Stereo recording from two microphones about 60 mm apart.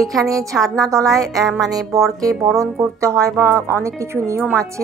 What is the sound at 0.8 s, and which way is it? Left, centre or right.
Speech, right.